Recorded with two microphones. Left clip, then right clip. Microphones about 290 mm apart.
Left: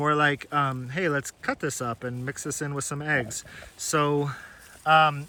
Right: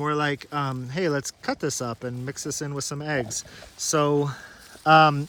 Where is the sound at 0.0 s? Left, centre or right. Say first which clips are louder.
Left 3 dB; centre.